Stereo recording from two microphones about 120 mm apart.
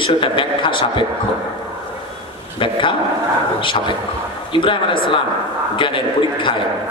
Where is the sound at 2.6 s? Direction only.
45° left (ahead or behind).